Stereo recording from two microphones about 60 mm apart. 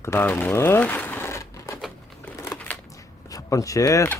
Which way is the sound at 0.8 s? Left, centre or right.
Left.